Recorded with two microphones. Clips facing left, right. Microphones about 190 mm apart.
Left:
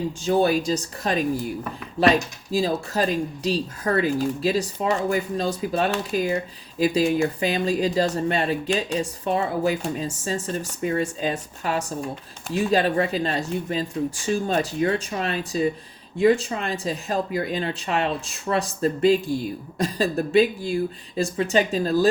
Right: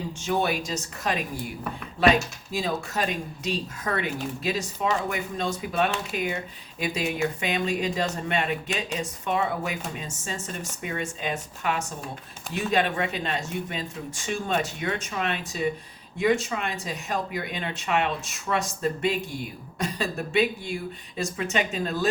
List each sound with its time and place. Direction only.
0.3 s speech: 35° left (ahead or behind)
2.5 s speech: 35° left (ahead or behind)